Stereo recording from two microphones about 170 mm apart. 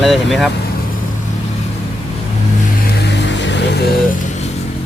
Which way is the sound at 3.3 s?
90° left.